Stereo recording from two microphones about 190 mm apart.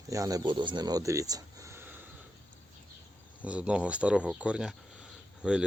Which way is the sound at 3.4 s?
5° right (ahead or behind).